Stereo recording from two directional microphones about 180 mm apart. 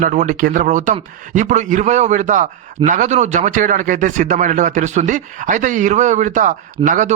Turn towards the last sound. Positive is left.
turn(degrees=-45)  # may be behind; listen again after turning